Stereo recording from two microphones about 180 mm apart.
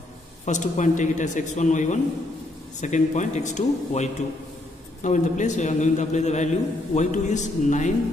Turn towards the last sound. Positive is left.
turn(degrees=45)  # may be behind; listen again after turning